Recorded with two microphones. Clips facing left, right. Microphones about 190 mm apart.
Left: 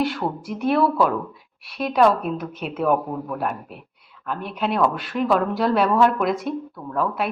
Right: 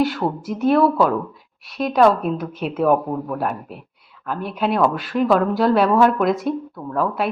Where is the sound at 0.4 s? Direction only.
Centre (ahead or behind).